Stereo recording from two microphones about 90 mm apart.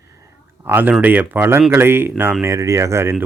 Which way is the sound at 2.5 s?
35° right (ahead or behind).